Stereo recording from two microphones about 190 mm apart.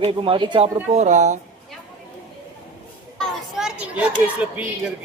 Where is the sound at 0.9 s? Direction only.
35° right (ahead or behind).